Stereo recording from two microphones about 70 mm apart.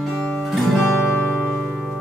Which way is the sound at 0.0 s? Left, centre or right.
Centre.